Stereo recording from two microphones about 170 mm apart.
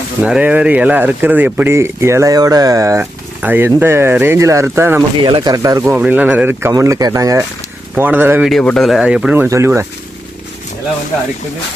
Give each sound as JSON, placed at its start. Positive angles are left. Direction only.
{"t": 0.2, "sound": "speech", "side_deg": -5}
{"t": 5.2, "sound": "speech", "side_deg": -25}
{"t": 8.4, "sound": "speech", "side_deg": 5}